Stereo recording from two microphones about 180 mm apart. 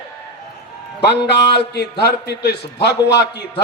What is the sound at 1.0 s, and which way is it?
Speech, 70° left (ahead or behind).